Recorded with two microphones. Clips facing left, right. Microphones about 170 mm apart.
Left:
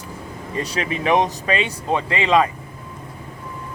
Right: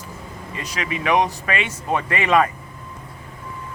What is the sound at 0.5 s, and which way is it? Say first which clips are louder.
Speech: left 4 dB; 30° left (ahead or behind).